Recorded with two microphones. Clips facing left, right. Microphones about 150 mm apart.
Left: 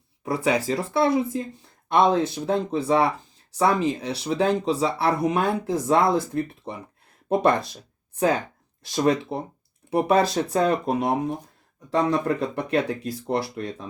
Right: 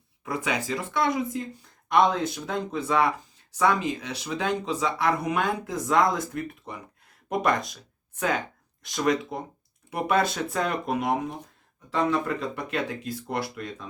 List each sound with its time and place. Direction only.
0.3 s speech: 35° left (ahead or behind)
8.9 s speech: 30° left (ahead or behind)